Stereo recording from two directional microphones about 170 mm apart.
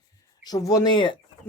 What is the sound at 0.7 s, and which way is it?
Speech, 25° left (ahead or behind).